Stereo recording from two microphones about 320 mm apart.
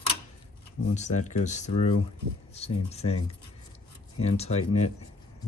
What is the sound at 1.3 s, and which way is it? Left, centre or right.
Speech, left.